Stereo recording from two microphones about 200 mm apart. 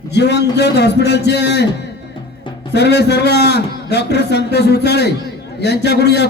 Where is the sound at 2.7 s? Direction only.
55° left (ahead or behind).